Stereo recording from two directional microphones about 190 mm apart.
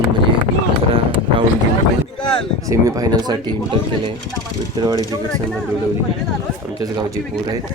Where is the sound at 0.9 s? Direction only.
25° right (ahead or behind).